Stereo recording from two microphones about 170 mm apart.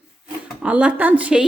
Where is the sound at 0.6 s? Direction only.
10° right (ahead or behind).